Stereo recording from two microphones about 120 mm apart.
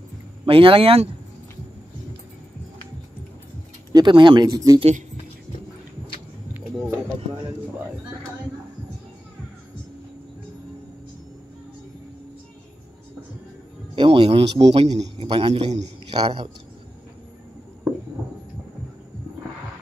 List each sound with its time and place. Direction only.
0.5 s speech: 50° right (ahead or behind)
3.9 s speech: 40° right (ahead or behind)
6.5 s a sound: 20° right (ahead or behind)
13.9 s a man's voice: 45° right (ahead or behind); by 15.0 s 65° right (ahead or behind)
15.1 s a man's voice: 45° right (ahead or behind)